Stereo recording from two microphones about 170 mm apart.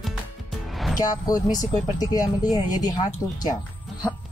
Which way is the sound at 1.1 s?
20° left (ahead or behind).